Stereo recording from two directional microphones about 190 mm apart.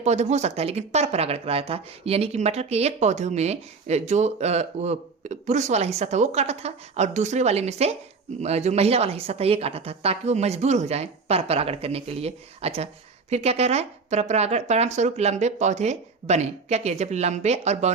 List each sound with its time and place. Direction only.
0.0 s speech: 35° right (ahead or behind)